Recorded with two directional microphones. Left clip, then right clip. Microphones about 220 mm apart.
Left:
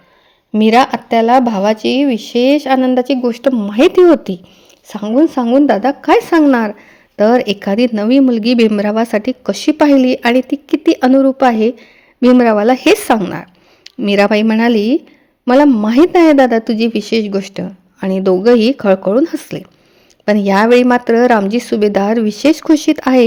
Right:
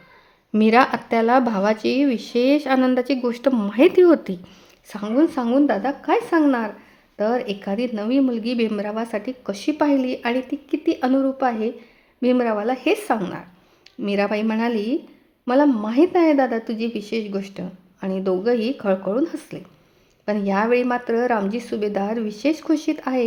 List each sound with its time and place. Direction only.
0.5 s speech: 15° left (ahead or behind)
4.9 s speech: 25° left (ahead or behind)